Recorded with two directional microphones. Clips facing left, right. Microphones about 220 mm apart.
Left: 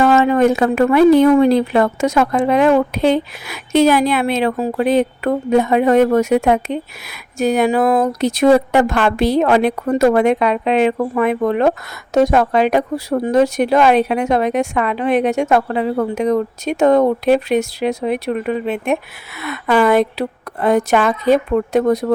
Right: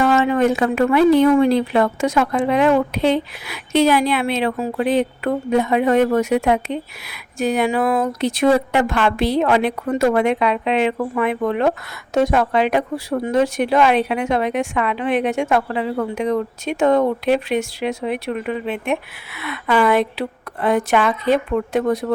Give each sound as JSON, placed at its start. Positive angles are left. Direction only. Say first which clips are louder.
{"t": 0.0, "sound": "a woman's voice", "louder": "left 3 dB", "side_deg": 45}